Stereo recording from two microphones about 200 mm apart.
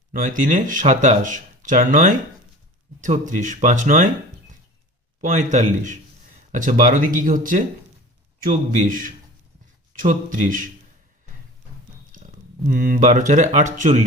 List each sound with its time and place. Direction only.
0.1 s speech: 40° right (ahead or behind)
5.2 s speech: 40° right (ahead or behind)
8.8 s speech: 40° right (ahead or behind)
12.1 s speech: 40° right (ahead or behind)